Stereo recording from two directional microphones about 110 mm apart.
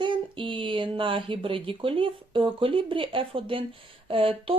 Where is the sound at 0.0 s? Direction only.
50° right (ahead or behind).